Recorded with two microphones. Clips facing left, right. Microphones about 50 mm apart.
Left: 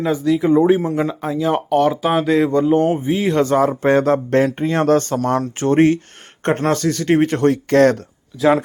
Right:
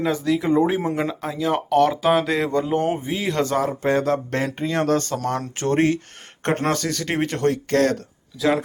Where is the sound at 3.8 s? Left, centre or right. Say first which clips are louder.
Left 5 dB; left.